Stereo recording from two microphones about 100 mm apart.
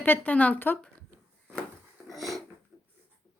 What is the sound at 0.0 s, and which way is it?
Speech, 15° left (ahead or behind).